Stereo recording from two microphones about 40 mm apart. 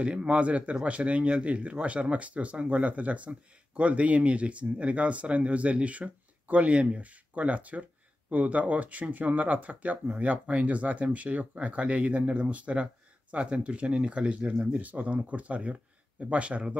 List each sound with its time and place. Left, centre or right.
0.0 s speech: right
14.6 s speech: right